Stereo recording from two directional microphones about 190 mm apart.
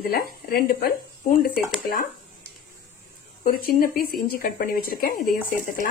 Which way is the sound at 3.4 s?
50° left (ahead or behind).